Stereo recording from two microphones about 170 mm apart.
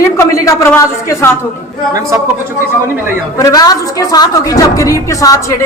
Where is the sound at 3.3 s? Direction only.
20° left (ahead or behind).